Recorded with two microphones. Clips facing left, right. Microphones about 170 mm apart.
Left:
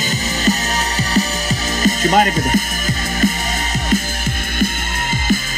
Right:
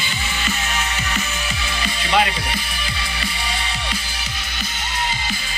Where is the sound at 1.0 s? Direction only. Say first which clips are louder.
Left 8 dB; 40° left (ahead or behind).